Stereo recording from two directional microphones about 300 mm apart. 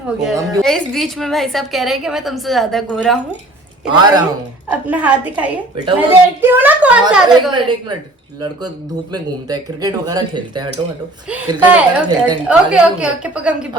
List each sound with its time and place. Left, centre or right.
0.2 s a woman's voice: centre
4.0 s a woman's voice: centre
9.1 s a woman's voice: centre